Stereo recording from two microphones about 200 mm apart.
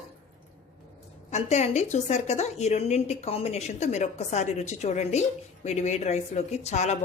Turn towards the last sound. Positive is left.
turn(degrees=35)  # may be behind; listen again after turning